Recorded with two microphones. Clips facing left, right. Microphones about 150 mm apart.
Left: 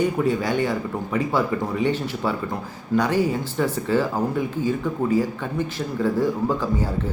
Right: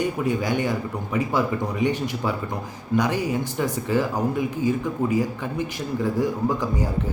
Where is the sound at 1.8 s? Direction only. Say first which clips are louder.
Right 1 dB; 15° right (ahead or behind).